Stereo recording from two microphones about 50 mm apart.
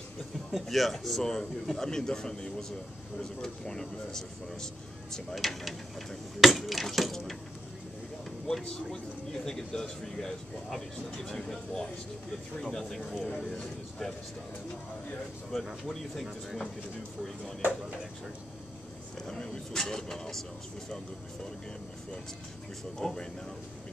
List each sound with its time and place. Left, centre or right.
0.5 s a man's voice: centre
5.1 s speech: centre
8.9 s a man's voice: centre
15.9 s speech: centre
17.6 s speech: right
19.2 s a man's voice: centre
22.9 s a man's voice: centre